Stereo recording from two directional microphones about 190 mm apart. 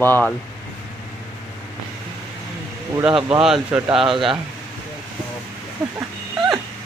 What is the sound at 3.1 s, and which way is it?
Speech, 25° right (ahead or behind).